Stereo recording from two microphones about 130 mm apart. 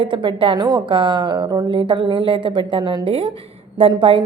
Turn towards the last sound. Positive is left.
turn(degrees=-40)  # may be behind; listen again after turning